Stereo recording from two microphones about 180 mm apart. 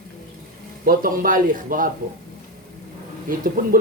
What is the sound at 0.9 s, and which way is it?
A man's voice, 50° right (ahead or behind).